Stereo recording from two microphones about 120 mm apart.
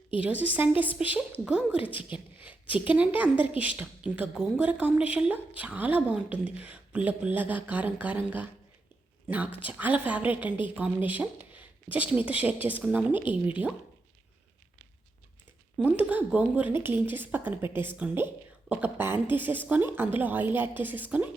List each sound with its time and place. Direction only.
0.1 s speech: 10° right (ahead or behind)
1.8 s speech: 45° left (ahead or behind)
2.0 s a sound: 10° right (ahead or behind)
2.8 s speech: 10° right (ahead or behind)
3.3 s speech: 50° left (ahead or behind)
3.6 s speech: 10° right (ahead or behind)
9.6 s speech: 15° right (ahead or behind)
15.8 s speech: 10° right (ahead or behind)